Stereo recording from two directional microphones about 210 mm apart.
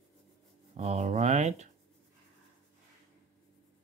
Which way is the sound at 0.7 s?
30° right (ahead or behind).